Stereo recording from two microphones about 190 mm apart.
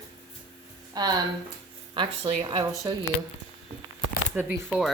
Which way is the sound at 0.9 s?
20° right (ahead or behind).